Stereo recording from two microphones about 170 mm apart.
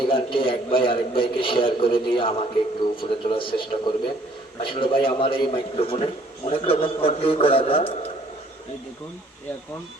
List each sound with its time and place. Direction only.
0.1 s a man's voice: 30° left (ahead or behind)